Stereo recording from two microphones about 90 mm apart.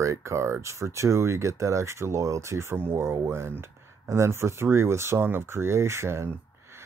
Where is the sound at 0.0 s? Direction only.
35° right (ahead or behind).